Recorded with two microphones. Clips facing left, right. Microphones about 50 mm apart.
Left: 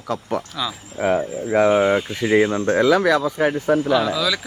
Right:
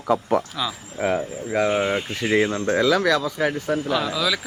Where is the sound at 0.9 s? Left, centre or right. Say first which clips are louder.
Left 4 dB; centre.